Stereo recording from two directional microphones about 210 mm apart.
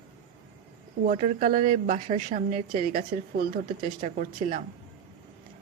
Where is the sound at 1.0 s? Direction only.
40° right (ahead or behind).